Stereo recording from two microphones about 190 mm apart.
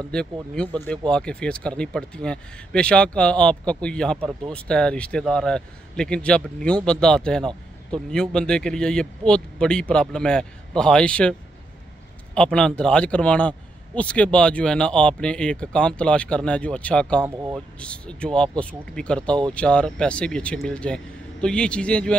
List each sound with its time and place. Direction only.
0.0 s a man's voice: 5° left (ahead or behind)
12.4 s a man's voice: 5° left (ahead or behind)
17.2 s speech: 15° right (ahead or behind)
17.7 s a man's voice: 5° left (ahead or behind)